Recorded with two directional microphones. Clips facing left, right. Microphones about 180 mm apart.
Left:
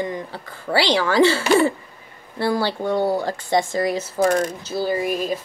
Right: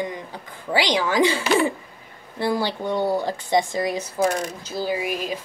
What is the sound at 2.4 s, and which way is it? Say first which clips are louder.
Speech: left 2 dB; 15° right (ahead or behind).